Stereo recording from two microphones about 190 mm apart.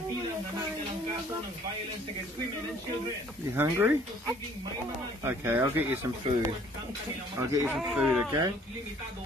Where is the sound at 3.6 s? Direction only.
10° right (ahead or behind).